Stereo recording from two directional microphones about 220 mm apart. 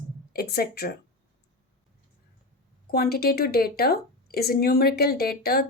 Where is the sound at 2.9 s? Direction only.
45° left (ahead or behind).